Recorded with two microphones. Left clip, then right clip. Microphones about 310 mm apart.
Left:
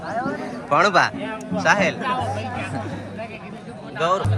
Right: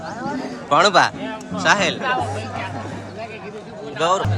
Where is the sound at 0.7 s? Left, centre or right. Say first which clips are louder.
Right 2 dB; centre.